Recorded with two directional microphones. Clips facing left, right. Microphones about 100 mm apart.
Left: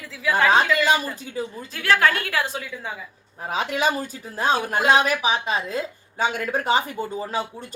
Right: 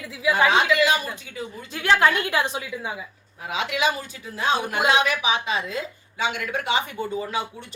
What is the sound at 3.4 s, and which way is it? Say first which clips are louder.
Speech: left 1 dB; 40° left (ahead or behind).